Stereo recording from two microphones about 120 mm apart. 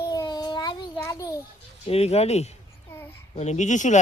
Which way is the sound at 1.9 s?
60° left (ahead or behind).